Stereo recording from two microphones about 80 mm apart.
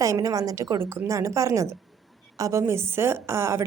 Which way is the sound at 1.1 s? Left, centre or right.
Right.